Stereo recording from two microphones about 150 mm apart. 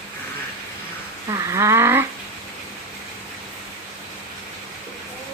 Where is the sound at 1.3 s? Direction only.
20° right (ahead or behind).